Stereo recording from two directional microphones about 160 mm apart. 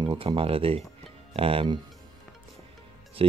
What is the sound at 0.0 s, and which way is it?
Speech, 30° right (ahead or behind).